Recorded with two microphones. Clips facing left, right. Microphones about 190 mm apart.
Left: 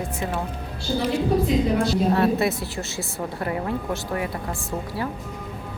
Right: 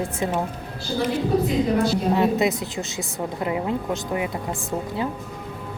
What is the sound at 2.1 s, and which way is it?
A woman's voice, 20° right (ahead or behind).